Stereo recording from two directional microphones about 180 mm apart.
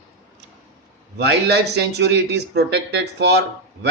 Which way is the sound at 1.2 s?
70° right (ahead or behind).